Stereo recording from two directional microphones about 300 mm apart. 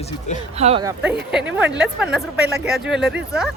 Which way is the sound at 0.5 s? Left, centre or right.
Right.